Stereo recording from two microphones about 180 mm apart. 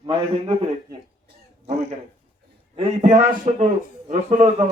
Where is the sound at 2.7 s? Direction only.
40° right (ahead or behind).